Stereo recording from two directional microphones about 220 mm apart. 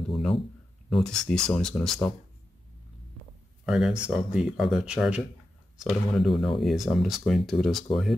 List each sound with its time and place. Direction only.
0.1 s a sound: centre (ahead or behind)
0.8 s speech: centre (ahead or behind)
3.6 s speech: centre (ahead or behind)